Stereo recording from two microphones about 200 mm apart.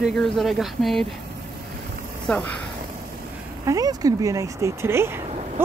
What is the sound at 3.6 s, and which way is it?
Speech, 15° right (ahead or behind).